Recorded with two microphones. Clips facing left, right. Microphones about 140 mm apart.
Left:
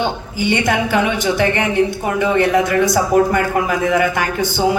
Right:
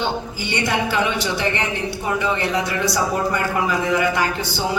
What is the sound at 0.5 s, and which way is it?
Speech, 50° left (ahead or behind).